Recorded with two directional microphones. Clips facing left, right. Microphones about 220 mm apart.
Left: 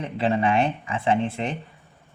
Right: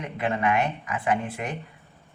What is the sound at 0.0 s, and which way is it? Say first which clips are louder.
Speech: left 4 dB; 30° left (ahead or behind).